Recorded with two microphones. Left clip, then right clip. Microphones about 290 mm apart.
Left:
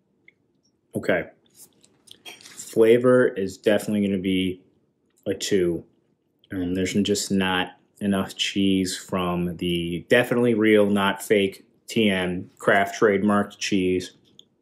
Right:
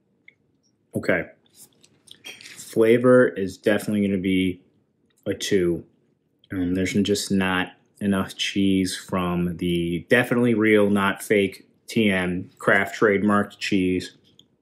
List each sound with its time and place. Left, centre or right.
0.9 s speech: centre
2.3 s a sound: centre
2.6 s speech: centre